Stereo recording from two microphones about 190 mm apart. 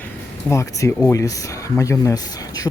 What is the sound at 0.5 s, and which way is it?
Speech, 15° left (ahead or behind).